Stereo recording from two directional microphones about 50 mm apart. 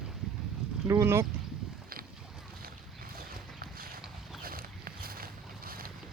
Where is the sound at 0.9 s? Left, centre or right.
Right.